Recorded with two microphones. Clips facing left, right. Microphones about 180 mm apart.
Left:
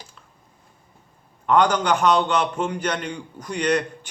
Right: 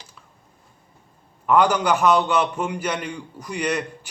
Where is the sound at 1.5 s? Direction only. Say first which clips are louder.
Even; 5° right (ahead or behind).